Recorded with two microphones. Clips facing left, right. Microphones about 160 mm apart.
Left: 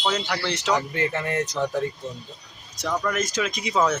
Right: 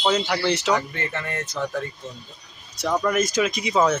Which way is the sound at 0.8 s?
15° left (ahead or behind).